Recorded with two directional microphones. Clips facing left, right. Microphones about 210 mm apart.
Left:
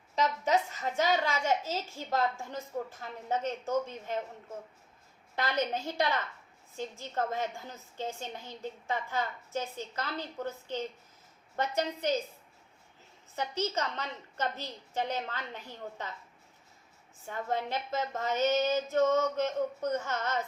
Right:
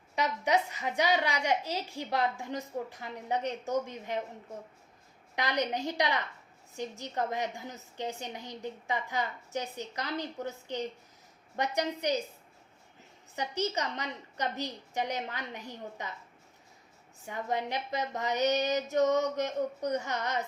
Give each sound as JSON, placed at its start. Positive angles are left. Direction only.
{"t": 0.2, "sound": "a woman's voice", "side_deg": -15}
{"t": 5.4, "sound": "a woman's voice", "side_deg": -15}
{"t": 13.3, "sound": "a woman's voice", "side_deg": -15}
{"t": 17.2, "sound": "a woman's voice", "side_deg": -15}